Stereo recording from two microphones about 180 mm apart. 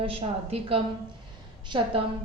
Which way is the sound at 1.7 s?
25° right (ahead or behind).